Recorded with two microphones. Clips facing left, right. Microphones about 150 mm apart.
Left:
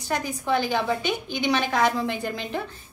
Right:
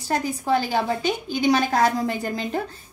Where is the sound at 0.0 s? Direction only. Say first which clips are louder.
Right 3 dB; 35° right (ahead or behind).